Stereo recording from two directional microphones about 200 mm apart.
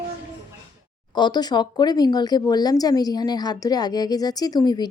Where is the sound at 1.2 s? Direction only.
20° left (ahead or behind).